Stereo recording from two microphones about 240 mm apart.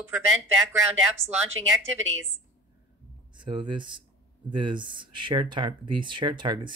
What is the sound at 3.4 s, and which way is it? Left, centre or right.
Speech, centre.